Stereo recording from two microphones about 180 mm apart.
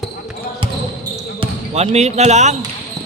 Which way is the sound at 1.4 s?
35° right (ahead or behind).